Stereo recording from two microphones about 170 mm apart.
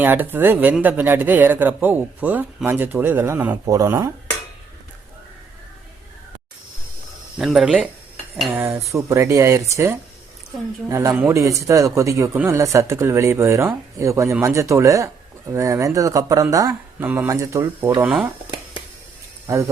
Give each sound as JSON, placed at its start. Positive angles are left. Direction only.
{"t": 0.0, "sound": "speech", "side_deg": -10}
{"t": 7.3, "sound": "speech", "side_deg": -5}
{"t": 8.9, "sound": "speech", "side_deg": -20}
{"t": 19.5, "sound": "speech", "side_deg": -15}